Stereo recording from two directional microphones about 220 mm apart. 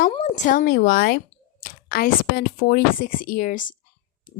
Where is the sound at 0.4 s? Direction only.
40° left (ahead or behind).